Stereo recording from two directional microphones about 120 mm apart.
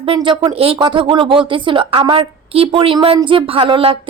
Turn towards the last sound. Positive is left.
turn(degrees=-45)  # may be behind; listen again after turning